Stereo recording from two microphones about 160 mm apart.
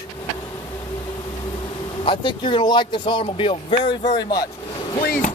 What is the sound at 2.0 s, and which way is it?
Speech, 30° left (ahead or behind).